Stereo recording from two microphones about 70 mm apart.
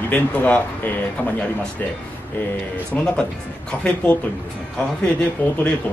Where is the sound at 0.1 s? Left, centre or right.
Left.